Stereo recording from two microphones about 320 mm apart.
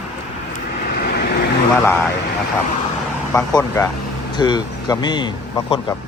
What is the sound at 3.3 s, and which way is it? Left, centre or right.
Speech, centre.